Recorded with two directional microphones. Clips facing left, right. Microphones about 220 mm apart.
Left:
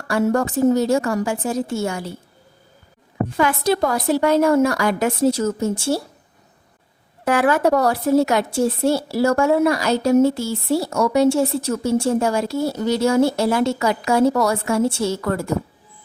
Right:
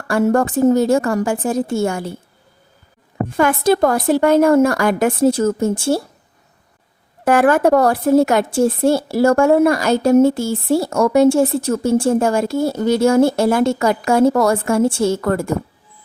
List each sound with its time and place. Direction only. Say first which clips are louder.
0.1 s a woman's voice: right 3 dB; 50° right (ahead or behind)
3.3 s a woman's voice: right 4 dB; 50° right (ahead or behind)
7.3 s a woman's voice: right 4 dB; 50° right (ahead or behind)